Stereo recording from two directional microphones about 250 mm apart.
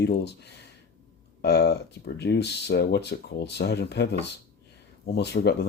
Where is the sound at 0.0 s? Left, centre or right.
Left.